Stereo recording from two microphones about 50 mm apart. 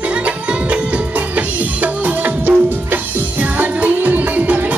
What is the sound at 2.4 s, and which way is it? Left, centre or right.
Music, right.